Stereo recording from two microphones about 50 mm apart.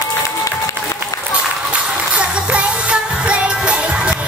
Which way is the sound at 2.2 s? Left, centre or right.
Right.